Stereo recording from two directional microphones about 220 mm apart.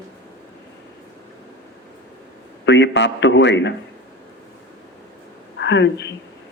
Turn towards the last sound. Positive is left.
turn(degrees=55)  # may be behind; listen again after turning